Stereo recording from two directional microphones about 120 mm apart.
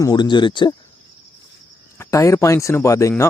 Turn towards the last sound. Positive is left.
turn(degrees=25)  # may be behind; listen again after turning